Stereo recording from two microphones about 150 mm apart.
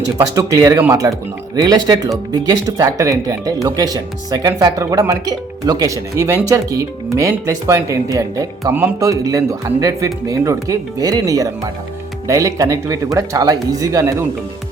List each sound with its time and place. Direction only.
0.2 s speech: 20° right (ahead or behind)